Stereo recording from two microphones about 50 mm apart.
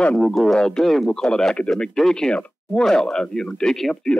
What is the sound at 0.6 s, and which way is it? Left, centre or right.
Speech, centre.